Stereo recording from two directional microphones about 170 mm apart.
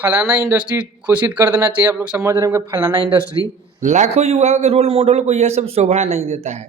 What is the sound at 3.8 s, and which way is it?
Speech, 45° right (ahead or behind).